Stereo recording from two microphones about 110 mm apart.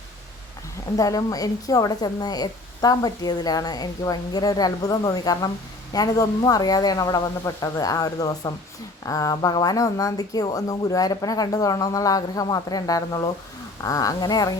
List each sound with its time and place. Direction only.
0.9 s a woman's voice: 30° left (ahead or behind)